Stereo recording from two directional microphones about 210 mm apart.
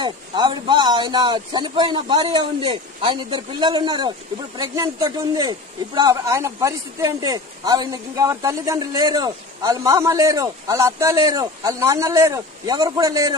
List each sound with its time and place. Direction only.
0.0 s a man's voice: 20° right (ahead or behind)